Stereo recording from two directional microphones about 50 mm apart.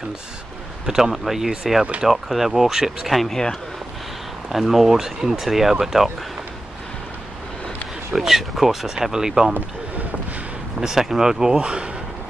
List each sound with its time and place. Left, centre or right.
0.8 s speech: centre
3.1 s speech: centre
4.5 s speech: centre
8.1 s speech: centre
10.8 s speech: centre